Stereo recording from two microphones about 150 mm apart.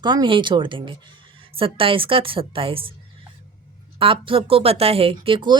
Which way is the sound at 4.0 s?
35° right (ahead or behind).